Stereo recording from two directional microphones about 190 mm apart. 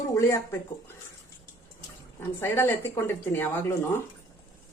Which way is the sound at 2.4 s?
10° left (ahead or behind).